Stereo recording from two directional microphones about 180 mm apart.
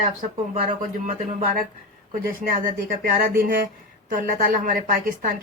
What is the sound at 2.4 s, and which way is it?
A woman's voice, 50° right (ahead or behind).